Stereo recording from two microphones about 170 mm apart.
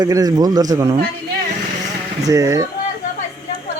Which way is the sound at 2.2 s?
20° right (ahead or behind).